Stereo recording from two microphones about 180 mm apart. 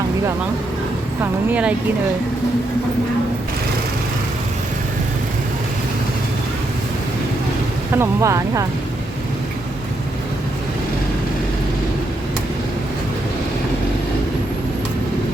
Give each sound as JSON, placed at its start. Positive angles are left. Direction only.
{"t": 1.2, "sound": "speech", "side_deg": -10}
{"t": 7.9, "sound": "speech", "side_deg": -15}